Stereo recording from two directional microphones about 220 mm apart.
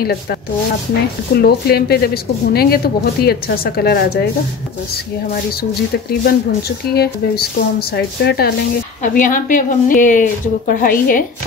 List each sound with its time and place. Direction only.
0.0 s a woman's voice: 45° left (ahead or behind)
1.4 s a woman's voice: 45° left (ahead or behind)
5.6 s a woman's voice: 45° left (ahead or behind)
9.0 s a woman's voice: 35° left (ahead or behind)